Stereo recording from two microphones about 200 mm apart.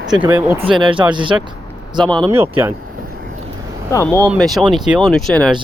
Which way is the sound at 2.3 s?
10° right (ahead or behind).